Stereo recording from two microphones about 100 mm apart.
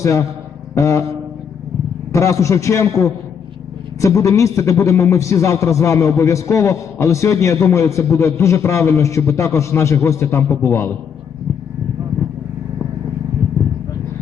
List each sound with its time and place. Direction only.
0.0 s a man's voice: 30° left (ahead or behind)
2.1 s a man's voice: 30° left (ahead or behind)